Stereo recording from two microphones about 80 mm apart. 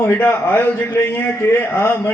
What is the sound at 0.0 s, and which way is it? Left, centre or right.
A man's voice, left.